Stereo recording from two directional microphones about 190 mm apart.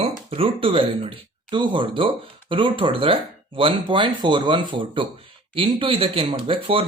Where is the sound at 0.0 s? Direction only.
30° right (ahead or behind).